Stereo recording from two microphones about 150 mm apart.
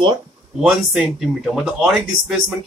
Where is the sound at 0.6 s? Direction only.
Centre (ahead or behind).